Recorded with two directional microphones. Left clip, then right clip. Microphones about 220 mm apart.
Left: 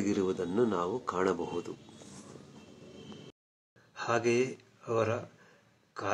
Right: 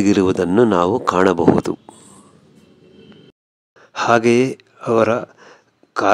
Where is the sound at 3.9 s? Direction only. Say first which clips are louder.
Right 15 dB; 45° right (ahead or behind).